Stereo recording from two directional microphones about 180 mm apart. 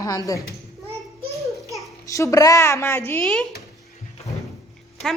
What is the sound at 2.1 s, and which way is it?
A woman's voice, 15° left (ahead or behind).